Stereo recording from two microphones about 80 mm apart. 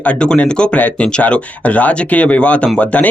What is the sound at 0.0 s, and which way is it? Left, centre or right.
A man's voice, centre.